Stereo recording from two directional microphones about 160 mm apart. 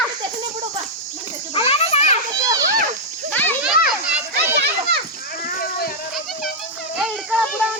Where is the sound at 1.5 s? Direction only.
40° left (ahead or behind).